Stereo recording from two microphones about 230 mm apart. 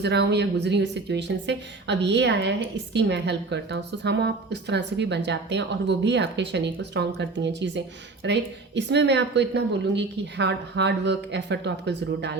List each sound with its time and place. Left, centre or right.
0.0 s a woman's voice: right